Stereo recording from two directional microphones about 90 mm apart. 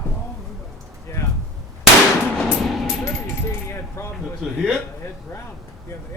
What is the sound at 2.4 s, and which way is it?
Music, centre (ahead or behind).